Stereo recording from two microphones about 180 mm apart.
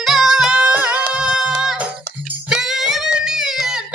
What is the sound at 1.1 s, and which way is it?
Music, 5° right (ahead or behind).